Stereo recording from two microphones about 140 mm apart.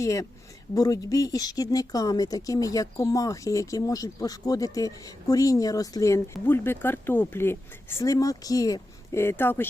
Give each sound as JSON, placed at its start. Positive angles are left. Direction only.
{"t": 0.0, "sound": "speech", "side_deg": 25}